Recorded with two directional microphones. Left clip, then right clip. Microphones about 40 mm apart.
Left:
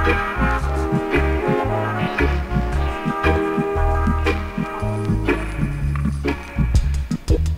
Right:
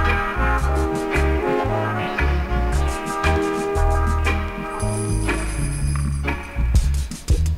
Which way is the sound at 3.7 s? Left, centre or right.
Right.